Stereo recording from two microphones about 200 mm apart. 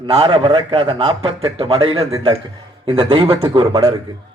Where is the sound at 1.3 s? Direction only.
80° right.